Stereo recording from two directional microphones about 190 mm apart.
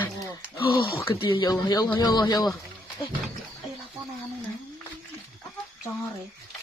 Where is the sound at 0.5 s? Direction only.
25° left (ahead or behind).